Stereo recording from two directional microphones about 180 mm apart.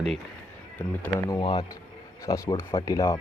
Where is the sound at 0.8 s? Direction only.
10° left (ahead or behind).